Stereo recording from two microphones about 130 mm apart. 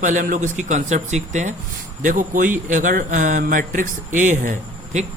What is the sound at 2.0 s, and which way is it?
A man's voice, 90° right.